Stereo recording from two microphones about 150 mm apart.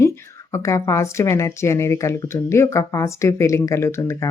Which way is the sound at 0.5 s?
20° left (ahead or behind).